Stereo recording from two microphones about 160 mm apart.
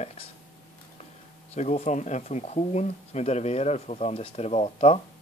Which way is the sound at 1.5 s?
45° left (ahead or behind).